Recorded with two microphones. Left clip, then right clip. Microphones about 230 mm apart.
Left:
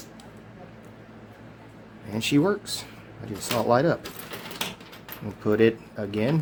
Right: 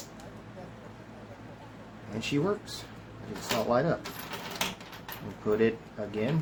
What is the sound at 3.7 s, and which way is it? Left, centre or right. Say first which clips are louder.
Speech: left 7 dB; left.